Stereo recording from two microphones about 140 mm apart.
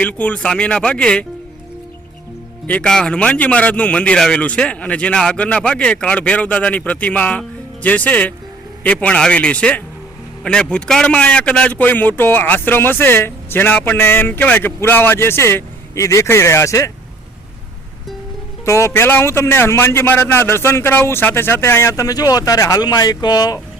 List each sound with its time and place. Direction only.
0.0 s a man's voice: 10° left (ahead or behind)
2.6 s a man's voice: 10° left (ahead or behind)
18.6 s a man's voice: 20° left (ahead or behind)